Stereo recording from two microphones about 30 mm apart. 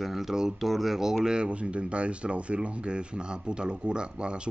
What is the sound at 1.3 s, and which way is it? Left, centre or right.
Speech, right.